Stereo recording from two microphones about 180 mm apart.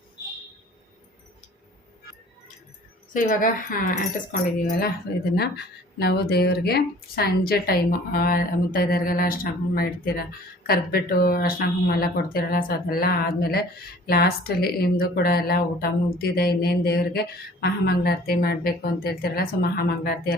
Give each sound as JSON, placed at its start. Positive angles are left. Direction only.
{"t": 3.1, "sound": "speech", "side_deg": 50}
{"t": 5.3, "sound": "speech", "side_deg": 65}